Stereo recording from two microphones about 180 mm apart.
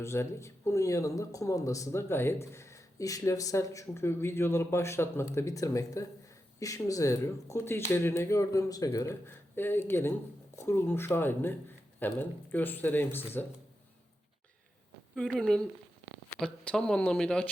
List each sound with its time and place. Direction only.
0.0 s speech: 15° left (ahead or behind)
15.1 s speech: centre (ahead or behind)